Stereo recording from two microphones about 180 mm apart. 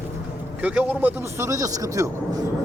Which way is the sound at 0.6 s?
5° right (ahead or behind).